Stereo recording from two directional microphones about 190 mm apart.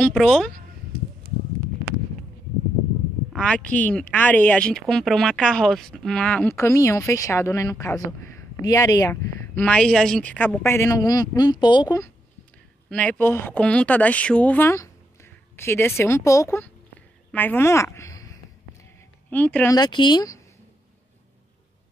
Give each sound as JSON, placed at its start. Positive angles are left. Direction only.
{"t": 0.0, "sound": "a sound", "side_deg": 5}
{"t": 3.3, "sound": "speech", "side_deg": 5}
{"t": 12.9, "sound": "a woman's voice", "side_deg": 5}
{"t": 19.7, "sound": "speech", "side_deg": 20}